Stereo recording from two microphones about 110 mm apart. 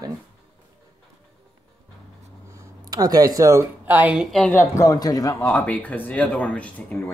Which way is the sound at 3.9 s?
15° right (ahead or behind).